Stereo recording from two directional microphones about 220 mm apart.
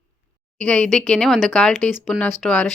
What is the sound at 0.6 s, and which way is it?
Speech, 5° left (ahead or behind).